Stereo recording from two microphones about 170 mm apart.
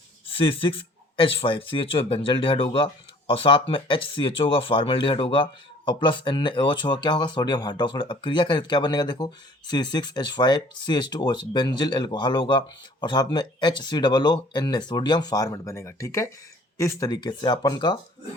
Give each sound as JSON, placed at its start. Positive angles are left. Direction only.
{"t": 0.3, "sound": "speech", "side_deg": 30}